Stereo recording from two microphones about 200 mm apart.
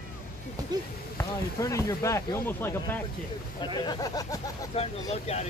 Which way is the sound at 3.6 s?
20° left (ahead or behind).